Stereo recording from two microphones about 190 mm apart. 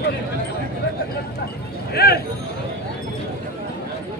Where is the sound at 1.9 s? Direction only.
55° left (ahead or behind).